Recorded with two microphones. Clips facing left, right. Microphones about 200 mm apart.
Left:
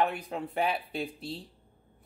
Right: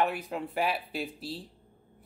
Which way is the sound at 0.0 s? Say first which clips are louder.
Even; centre (ahead or behind).